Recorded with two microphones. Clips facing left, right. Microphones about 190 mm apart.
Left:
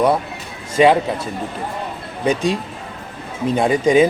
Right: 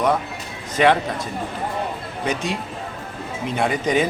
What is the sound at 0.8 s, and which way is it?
Speech, 10° left (ahead or behind).